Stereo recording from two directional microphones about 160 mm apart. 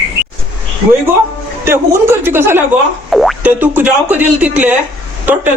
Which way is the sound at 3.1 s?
Centre (ahead or behind).